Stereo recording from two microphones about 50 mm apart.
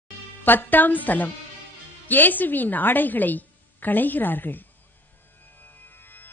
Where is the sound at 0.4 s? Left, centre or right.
Left.